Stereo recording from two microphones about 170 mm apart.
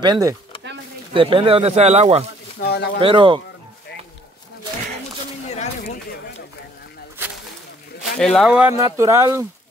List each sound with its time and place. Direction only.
0.0 s speech: 25° right (ahead or behind); by 2.2 s 40° right (ahead or behind)
2.6 s speech: 80° left
3.0 s speech: 30° right (ahead or behind)
8.2 s speech: 5° left (ahead or behind)
8.7 s speech: 20° right (ahead or behind)